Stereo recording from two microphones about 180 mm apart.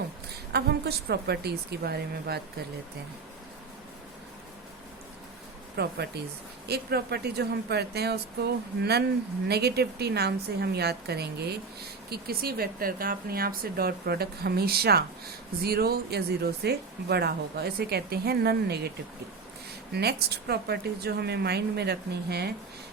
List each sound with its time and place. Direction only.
0.5 s a woman's voice: 60° right (ahead or behind)
5.7 s a woman's voice: 65° right (ahead or behind)
19.9 s a woman's voice: 65° right (ahead or behind)